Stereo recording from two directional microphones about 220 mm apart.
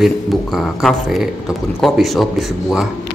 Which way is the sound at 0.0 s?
Centre (ahead or behind).